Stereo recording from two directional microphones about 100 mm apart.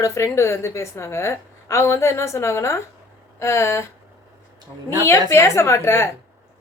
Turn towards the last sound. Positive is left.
turn(degrees=25)  # may be behind; listen again after turning